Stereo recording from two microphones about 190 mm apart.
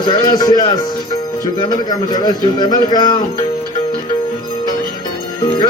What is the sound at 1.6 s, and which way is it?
A man's voice, 20° left (ahead or behind).